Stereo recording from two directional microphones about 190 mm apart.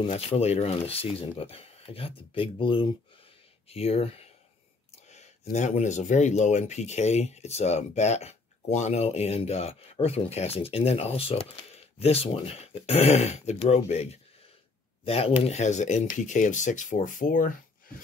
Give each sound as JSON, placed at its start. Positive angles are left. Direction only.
{"t": 0.0, "sound": "speech", "side_deg": 35}